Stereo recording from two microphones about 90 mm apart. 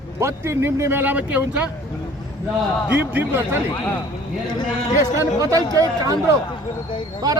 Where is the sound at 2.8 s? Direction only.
20° right (ahead or behind).